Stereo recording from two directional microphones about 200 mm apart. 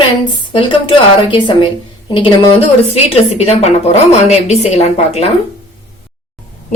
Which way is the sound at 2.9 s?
30° left (ahead or behind).